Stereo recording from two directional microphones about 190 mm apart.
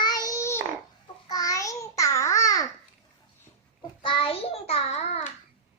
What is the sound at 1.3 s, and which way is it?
Babbling, 20° left (ahead or behind).